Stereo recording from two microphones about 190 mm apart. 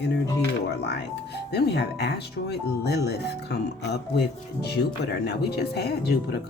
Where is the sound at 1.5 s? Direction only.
60° left (ahead or behind).